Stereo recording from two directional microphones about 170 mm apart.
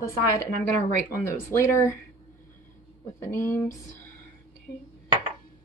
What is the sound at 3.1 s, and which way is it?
Speech, 15° left (ahead or behind).